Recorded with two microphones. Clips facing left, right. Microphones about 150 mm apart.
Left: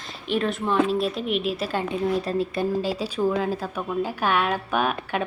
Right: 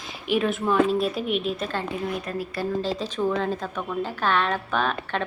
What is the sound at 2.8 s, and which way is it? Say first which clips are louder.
A woman's voice: left 1 dB; 10° left (ahead or behind).